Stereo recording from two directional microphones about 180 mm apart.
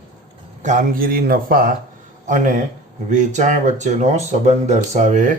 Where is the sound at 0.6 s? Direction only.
45° right (ahead or behind).